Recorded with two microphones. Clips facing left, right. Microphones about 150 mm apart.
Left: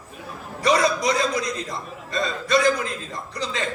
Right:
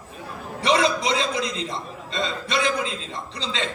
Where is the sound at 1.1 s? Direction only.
25° right (ahead or behind).